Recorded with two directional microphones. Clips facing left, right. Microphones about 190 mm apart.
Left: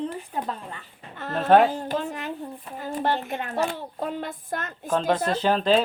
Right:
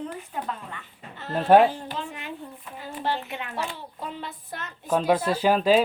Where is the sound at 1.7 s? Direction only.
45° left (ahead or behind).